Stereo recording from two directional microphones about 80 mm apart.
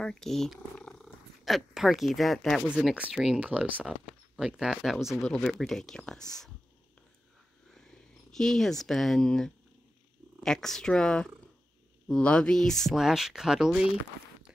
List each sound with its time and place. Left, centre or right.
0.0 s speech: centre
2.9 s speech: centre
7.7 s speech: centre